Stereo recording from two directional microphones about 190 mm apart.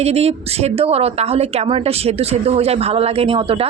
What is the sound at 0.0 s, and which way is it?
A man's voice, 35° right (ahead or behind).